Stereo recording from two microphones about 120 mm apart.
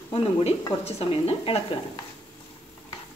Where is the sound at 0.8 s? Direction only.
55° left (ahead or behind).